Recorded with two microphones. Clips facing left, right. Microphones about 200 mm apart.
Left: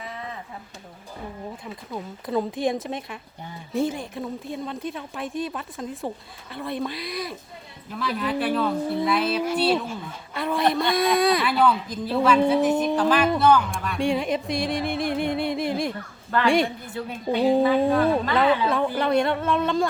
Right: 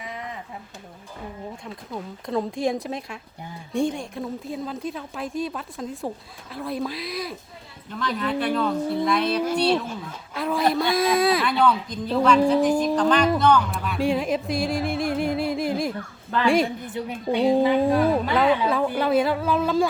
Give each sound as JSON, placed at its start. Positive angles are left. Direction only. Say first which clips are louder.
{"t": 1.6, "sound": "speech", "louder": "even", "side_deg": 0}
{"t": 17.0, "sound": "speech", "louder": "right 1 dB", "side_deg": -15}
{"t": 17.7, "sound": "speech", "louder": "even", "side_deg": 0}